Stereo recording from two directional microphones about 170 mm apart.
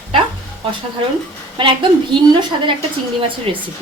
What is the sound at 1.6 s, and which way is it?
Speech, 30° right (ahead or behind).